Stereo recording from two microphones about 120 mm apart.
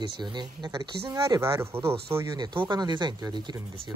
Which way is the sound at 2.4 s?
40° right (ahead or behind).